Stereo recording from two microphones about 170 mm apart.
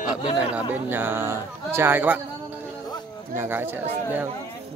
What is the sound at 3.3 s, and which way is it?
Speech, 15° right (ahead or behind).